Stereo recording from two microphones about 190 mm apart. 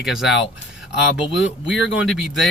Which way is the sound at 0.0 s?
Centre (ahead or behind).